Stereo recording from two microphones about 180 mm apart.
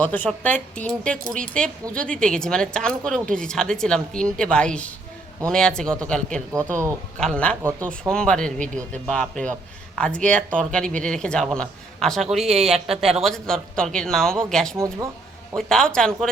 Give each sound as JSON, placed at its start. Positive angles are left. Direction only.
{"t": 0.0, "sound": "speech", "side_deg": 10}
{"t": 7.6, "sound": "speech", "side_deg": -15}
{"t": 8.1, "sound": "speech", "side_deg": 5}